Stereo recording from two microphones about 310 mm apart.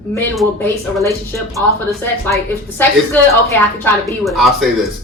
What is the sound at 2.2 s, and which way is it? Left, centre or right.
A woman's voice, centre.